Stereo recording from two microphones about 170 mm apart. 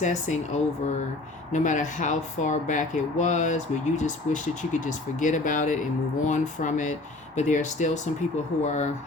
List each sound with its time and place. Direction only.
0.0 s speech: 45° left (ahead or behind)